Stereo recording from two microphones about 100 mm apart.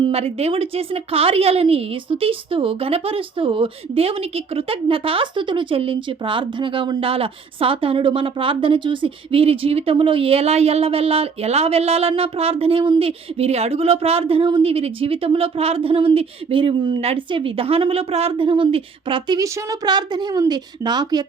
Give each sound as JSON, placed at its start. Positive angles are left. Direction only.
{"t": 0.0, "sound": "a woman's voice", "side_deg": -75}
{"t": 17.0, "sound": "a woman's voice", "side_deg": -75}
{"t": 19.4, "sound": "a woman's voice", "side_deg": -45}